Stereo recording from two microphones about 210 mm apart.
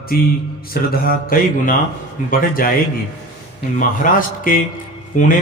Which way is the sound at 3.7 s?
40° left (ahead or behind).